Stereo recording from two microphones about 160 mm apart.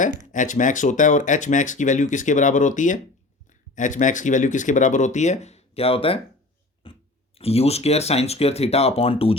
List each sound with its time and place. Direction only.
0.3 s speech: 50° left (ahead or behind); by 6.1 s 35° left (ahead or behind)
6.8 s beatboxing: 35° left (ahead or behind)
7.3 s speech: 40° left (ahead or behind)